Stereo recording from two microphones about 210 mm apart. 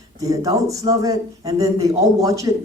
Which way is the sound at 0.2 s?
15° right (ahead or behind).